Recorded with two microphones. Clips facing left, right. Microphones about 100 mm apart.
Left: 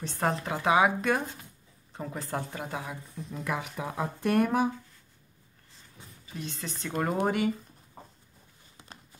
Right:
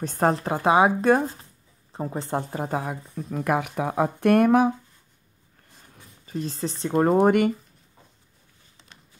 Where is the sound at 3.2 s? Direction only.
60° right (ahead or behind).